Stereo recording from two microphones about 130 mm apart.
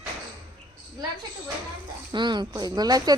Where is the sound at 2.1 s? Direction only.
35° right (ahead or behind).